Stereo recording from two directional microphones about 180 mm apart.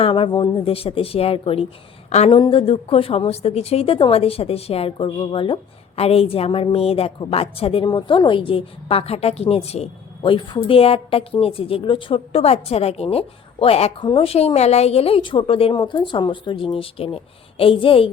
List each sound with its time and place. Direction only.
0.0 s a woman's voice: 30° left (ahead or behind)